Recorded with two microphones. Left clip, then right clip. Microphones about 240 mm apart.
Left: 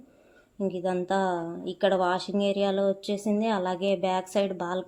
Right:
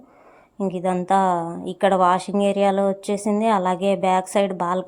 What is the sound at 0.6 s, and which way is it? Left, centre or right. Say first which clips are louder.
A woman's voice: right 5 dB; right.